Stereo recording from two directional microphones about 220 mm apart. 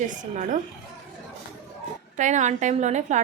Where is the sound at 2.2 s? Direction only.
35° right (ahead or behind).